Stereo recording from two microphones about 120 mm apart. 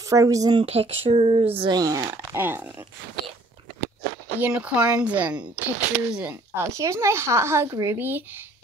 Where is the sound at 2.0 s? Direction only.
20° right (ahead or behind).